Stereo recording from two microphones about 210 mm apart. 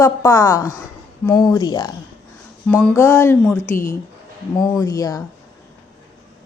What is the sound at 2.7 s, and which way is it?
Speech, 5° left (ahead or behind).